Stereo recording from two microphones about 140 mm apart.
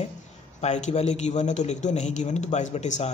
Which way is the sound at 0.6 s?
55° left (ahead or behind).